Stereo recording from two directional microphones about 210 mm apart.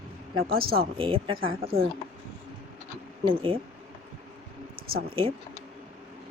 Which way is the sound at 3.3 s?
25° right (ahead or behind).